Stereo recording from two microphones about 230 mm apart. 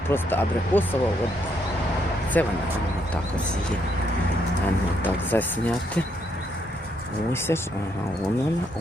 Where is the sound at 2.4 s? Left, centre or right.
Centre.